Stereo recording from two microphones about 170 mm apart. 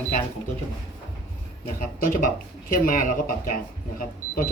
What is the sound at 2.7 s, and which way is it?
Mantra, 55° left (ahead or behind).